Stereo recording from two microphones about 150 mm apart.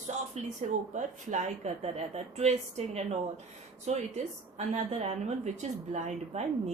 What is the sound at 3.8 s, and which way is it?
A woman's voice, 50° right (ahead or behind).